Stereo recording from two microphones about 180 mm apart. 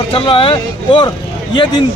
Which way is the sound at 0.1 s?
30° left (ahead or behind).